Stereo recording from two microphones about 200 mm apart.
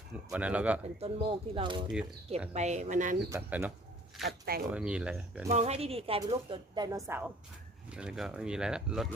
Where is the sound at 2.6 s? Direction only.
35° right (ahead or behind).